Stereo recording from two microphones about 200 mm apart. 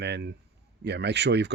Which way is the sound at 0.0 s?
55° right (ahead or behind).